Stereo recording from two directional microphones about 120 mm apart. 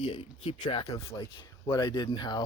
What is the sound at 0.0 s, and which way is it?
Speech, 40° left (ahead or behind).